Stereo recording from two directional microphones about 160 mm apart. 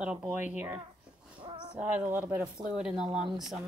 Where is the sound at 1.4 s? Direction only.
30° right (ahead or behind).